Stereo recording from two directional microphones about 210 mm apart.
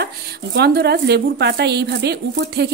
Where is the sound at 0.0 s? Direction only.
50° right (ahead or behind).